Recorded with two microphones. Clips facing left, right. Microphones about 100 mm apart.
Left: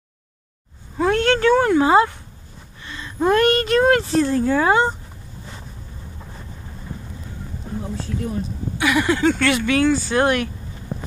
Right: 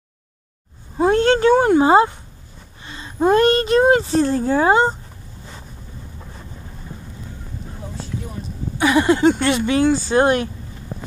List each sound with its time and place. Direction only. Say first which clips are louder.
0.9 s a woman's voice: right 3 dB; 30° right (ahead or behind)
8.7 s a woman's voice: right 4 dB; 30° right (ahead or behind)